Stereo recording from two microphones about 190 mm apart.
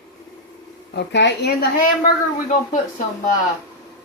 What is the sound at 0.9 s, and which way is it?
Speech, 65° left (ahead or behind).